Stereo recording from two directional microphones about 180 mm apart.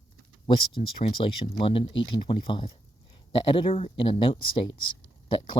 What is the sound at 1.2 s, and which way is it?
Speech, 30° left (ahead or behind).